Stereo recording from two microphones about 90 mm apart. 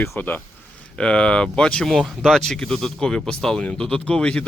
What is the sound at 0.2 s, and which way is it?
A man's voice, 20° left (ahead or behind).